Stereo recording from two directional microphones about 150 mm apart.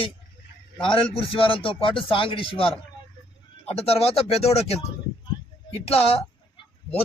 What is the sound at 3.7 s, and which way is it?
Speech, 40° left (ahead or behind).